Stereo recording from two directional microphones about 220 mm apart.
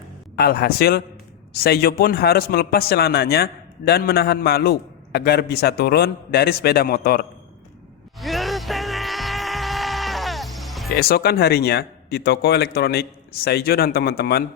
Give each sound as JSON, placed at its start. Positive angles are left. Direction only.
{"t": 0.3, "sound": "speech", "side_deg": 45}
{"t": 8.2, "sound": "music", "side_deg": 0}
{"t": 10.9, "sound": "speech", "side_deg": 45}